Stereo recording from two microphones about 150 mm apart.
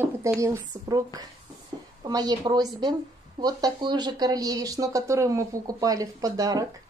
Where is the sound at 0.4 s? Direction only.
25° right (ahead or behind).